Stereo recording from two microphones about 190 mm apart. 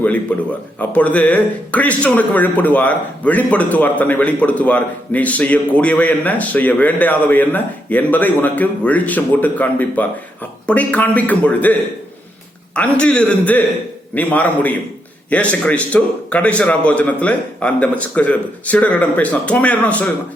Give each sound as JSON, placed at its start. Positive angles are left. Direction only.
{"t": 0.0, "sound": "speech", "side_deg": 10}